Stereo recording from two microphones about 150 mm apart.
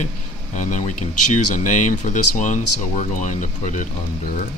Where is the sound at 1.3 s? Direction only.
55° left (ahead or behind).